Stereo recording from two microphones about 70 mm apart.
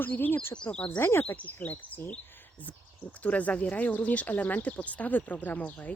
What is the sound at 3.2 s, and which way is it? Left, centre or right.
Speech, left.